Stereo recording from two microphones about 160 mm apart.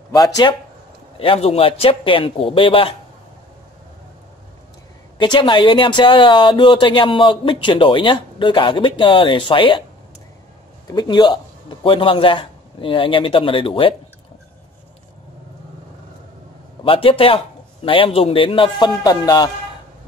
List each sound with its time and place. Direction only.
0.4 s speech: 25° left (ahead or behind)
1.2 s speech: 35° left (ahead or behind)
5.2 s speech: 30° left (ahead or behind)
10.9 s speech: 25° left (ahead or behind)
16.8 s speech: 35° left (ahead or behind)